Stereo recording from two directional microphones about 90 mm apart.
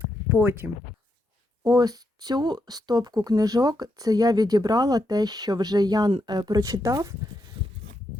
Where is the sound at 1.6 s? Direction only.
50° right (ahead or behind).